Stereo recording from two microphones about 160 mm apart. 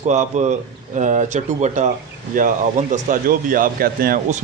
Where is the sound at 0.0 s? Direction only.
45° right (ahead or behind); by 4.2 s 65° right (ahead or behind).